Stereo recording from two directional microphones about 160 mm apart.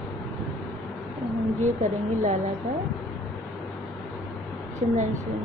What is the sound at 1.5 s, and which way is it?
Speech, 50° right (ahead or behind).